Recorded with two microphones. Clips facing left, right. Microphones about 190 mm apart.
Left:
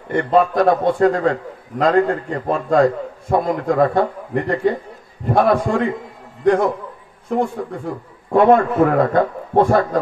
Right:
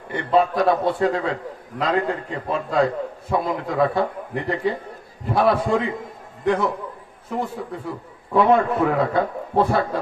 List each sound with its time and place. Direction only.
0.1 s a man's voice: 50° left (ahead or behind)